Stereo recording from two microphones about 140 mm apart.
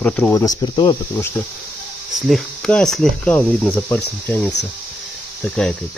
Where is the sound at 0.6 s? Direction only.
30° left (ahead or behind).